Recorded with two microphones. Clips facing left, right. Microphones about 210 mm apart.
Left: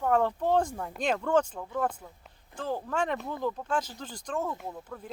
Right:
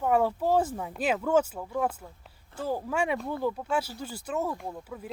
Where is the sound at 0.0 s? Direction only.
10° right (ahead or behind).